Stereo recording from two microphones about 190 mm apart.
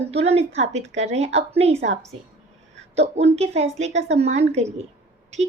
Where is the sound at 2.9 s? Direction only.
35° right (ahead or behind).